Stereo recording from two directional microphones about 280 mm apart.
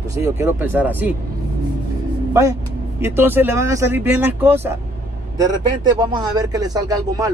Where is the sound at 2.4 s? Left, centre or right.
Centre.